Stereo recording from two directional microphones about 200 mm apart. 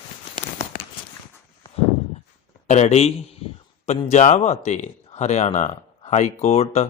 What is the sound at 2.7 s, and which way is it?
Speech, 35° left (ahead or behind).